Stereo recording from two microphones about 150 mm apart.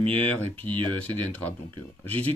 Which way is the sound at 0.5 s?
30° right (ahead or behind).